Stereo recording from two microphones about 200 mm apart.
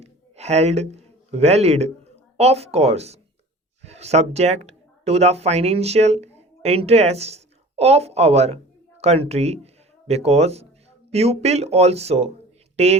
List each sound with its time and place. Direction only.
0.0 s a woman's voice: 30° right (ahead or behind)